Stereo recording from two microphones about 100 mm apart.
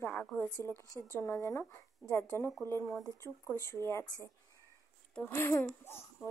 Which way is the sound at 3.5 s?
25° left (ahead or behind).